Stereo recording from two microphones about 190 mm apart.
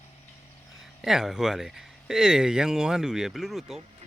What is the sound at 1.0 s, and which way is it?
Speech, centre (ahead or behind).